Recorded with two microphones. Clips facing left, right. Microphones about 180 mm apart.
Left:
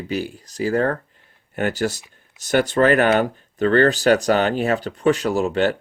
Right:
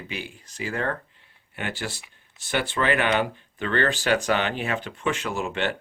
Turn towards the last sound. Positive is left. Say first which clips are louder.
# left 8 dB
turn(degrees=40)  # may be behind; listen again after turning